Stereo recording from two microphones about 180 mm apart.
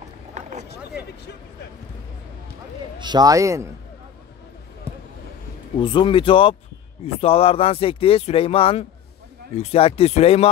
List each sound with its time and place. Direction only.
0.3 s boat: 40° right (ahead or behind)
3.0 s a man's voice: 25° right (ahead or behind)
5.8 s speech: 30° left (ahead or behind)